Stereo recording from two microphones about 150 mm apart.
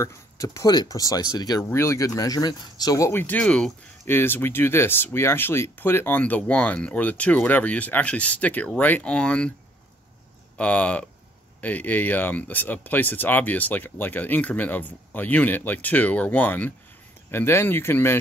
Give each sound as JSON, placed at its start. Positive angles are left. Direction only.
{"t": 0.0, "sound": "speech", "side_deg": 20}
{"t": 10.6, "sound": "speech", "side_deg": 10}